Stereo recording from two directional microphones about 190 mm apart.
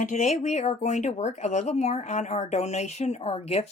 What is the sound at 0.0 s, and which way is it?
Speech, 40° left (ahead or behind).